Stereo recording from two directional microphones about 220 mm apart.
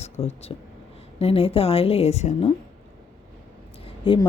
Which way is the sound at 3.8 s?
25° left (ahead or behind).